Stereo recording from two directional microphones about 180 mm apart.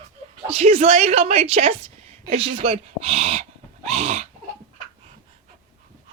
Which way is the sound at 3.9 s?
35° right (ahead or behind).